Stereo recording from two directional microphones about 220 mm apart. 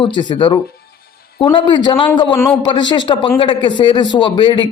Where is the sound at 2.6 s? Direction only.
20° left (ahead or behind).